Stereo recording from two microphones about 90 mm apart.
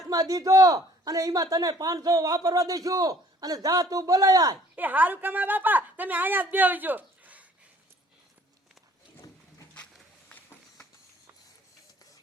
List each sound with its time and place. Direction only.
0.1 s a man's voice: 40° right (ahead or behind)
4.7 s speech: 20° right (ahead or behind)
10.2 s run: 20° left (ahead or behind)